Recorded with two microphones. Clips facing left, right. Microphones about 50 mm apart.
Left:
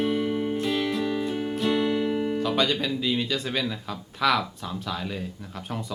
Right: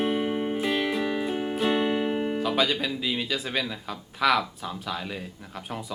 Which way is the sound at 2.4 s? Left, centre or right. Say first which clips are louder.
Even; centre.